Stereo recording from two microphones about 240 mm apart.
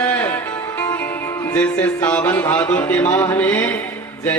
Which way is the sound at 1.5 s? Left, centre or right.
Centre.